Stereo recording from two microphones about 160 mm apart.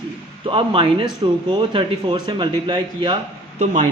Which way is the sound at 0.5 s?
35° right (ahead or behind).